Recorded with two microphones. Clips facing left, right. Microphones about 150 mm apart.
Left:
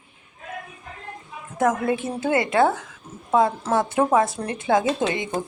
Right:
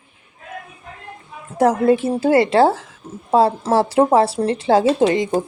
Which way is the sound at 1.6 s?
35° right (ahead or behind).